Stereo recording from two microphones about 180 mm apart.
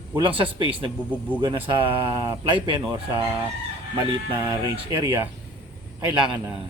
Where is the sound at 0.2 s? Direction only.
30° right (ahead or behind).